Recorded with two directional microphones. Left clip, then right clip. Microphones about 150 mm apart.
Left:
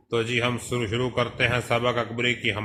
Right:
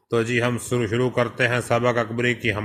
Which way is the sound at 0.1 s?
25° right (ahead or behind).